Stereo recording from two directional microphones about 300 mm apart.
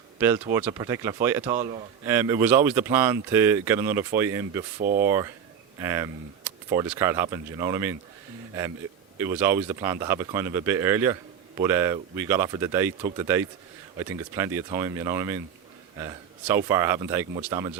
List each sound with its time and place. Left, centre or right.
0.2 s speech: centre
4.8 s speech: right
5.0 s speech: centre
9.1 s speech: centre